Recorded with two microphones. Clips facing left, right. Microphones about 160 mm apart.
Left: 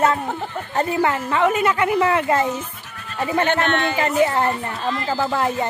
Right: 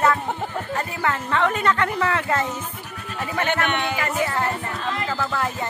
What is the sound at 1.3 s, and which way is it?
A woman's voice, 10° left (ahead or behind).